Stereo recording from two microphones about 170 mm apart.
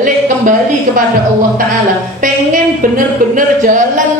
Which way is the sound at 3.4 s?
50° right (ahead or behind).